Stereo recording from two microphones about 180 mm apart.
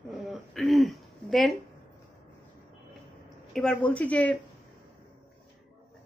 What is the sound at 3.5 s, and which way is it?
Speech, 5° left (ahead or behind).